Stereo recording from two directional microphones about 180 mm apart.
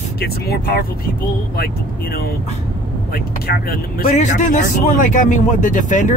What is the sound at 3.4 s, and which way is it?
Speech, 55° left (ahead or behind).